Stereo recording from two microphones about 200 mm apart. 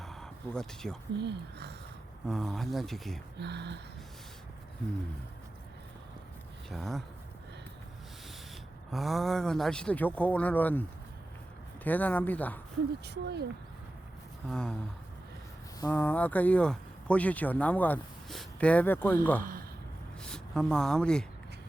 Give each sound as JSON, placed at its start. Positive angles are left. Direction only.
{"t": 0.0, "sound": "a sound", "side_deg": 0}
{"t": 1.2, "sound": "speech", "side_deg": -55}
{"t": 2.2, "sound": "speech", "side_deg": 0}
{"t": 3.3, "sound": "speech", "side_deg": -55}
{"t": 6.7, "sound": "speech", "side_deg": 0}
{"t": 8.9, "sound": "speech", "side_deg": 0}
{"t": 13.1, "sound": "speech", "side_deg": -55}
{"t": 14.5, "sound": "speech", "side_deg": 5}
{"t": 15.8, "sound": "speech", "side_deg": 10}
{"t": 19.4, "sound": "speech", "side_deg": -45}
{"t": 20.2, "sound": "speech", "side_deg": 5}